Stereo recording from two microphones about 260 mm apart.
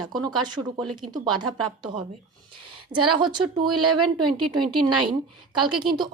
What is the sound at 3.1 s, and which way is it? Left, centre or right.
Speech, centre.